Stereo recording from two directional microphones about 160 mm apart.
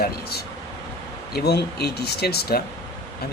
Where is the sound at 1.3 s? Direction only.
90° left.